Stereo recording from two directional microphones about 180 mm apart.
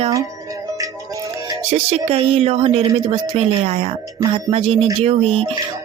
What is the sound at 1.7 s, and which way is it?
Speech, 35° right (ahead or behind).